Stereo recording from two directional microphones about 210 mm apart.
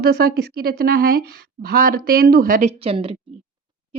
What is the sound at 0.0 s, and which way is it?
Speech, 50° right (ahead or behind).